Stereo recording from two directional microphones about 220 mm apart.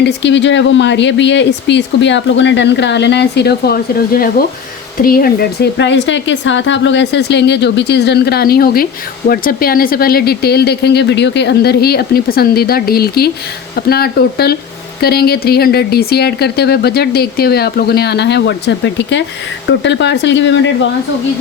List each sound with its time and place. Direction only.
0.0 s speech: 55° left (ahead or behind)